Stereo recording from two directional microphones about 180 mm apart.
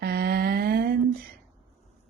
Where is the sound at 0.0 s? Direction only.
60° right (ahead or behind).